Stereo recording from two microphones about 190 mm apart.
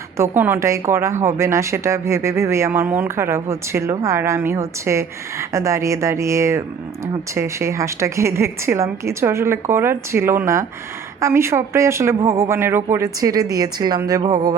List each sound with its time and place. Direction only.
0.2 s speech: 10° right (ahead or behind)